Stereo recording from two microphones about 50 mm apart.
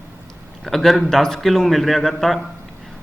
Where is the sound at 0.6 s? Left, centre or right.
Centre.